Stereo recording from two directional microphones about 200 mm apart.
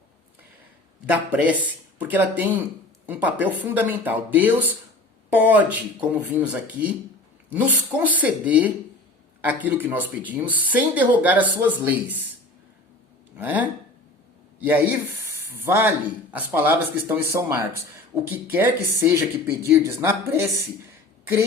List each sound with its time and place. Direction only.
1.0 s speech: 5° right (ahead or behind)
13.4 s speech: 10° right (ahead or behind)